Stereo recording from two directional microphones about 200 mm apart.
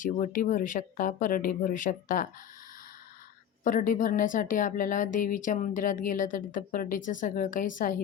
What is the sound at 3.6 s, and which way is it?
Speech, 40° left (ahead or behind).